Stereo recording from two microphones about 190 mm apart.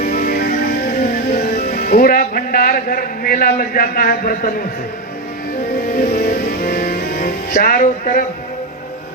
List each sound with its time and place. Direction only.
0.0 s music: 45° left (ahead or behind)
5.9 s music: 50° left (ahead or behind)